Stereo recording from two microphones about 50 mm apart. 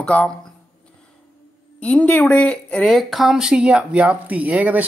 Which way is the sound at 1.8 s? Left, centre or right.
Left.